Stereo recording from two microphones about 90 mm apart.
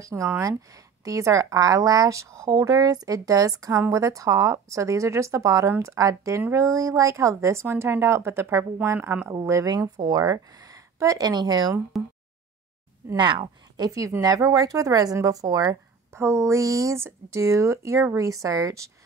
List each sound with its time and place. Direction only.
0.0 s a woman's voice: 35° right (ahead or behind)
9.3 s speech: 40° right (ahead or behind)
11.9 s a sound: centre (ahead or behind)
13.1 s speech: 60° right (ahead or behind)
13.8 s speech: 40° right (ahead or behind)
16.1 s speech: 30° right (ahead or behind)